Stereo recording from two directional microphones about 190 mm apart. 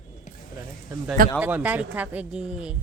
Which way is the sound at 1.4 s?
10° right (ahead or behind).